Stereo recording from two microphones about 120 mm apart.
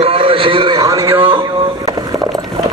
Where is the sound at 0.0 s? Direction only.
50° right (ahead or behind).